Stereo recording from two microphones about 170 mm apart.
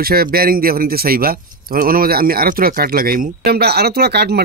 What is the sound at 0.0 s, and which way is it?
Speech, 65° right (ahead or behind).